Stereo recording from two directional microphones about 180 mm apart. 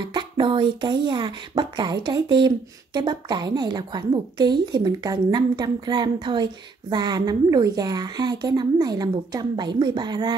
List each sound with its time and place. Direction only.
0.0 s speech: 25° right (ahead or behind)